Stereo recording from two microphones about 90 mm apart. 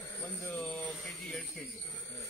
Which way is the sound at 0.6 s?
5° left (ahead or behind).